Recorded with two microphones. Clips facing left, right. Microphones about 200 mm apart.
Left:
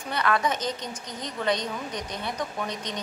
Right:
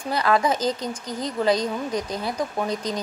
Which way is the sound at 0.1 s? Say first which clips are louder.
Right 4 dB; 30° right (ahead or behind).